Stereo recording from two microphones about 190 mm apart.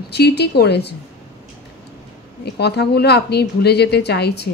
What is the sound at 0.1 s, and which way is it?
Speech, 60° left (ahead or behind).